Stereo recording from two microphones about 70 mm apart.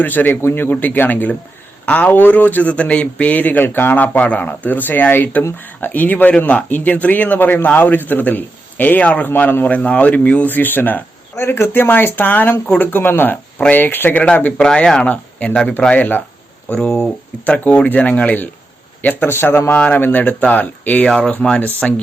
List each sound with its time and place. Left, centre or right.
0.0 s speech: left
14.6 s speech: centre
16.8 s speech: centre
17.4 s a man's voice: left